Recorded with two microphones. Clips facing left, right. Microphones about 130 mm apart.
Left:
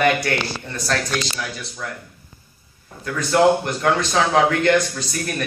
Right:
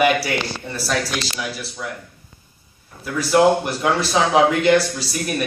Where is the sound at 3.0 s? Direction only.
10° right (ahead or behind).